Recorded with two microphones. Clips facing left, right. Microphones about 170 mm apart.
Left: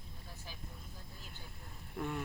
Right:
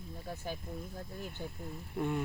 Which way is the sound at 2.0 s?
15° right (ahead or behind).